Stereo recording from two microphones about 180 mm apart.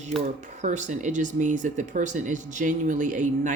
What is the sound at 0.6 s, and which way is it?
Speech, 40° right (ahead or behind).